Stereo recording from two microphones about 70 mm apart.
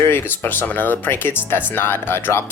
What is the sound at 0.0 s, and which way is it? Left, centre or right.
Speech, left.